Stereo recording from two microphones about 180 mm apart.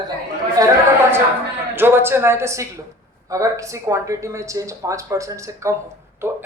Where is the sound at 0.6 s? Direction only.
20° right (ahead or behind).